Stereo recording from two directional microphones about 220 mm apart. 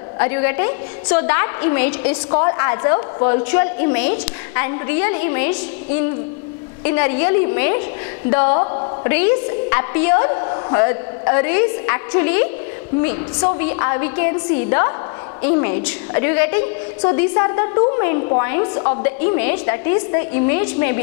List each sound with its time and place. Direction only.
0.2 s a woman's voice: 15° left (ahead or behind)
2.3 s a woman's voice: 20° left (ahead or behind)
8.5 s a sound: 25° left (ahead or behind)
9.1 s a woman's voice: 15° left (ahead or behind)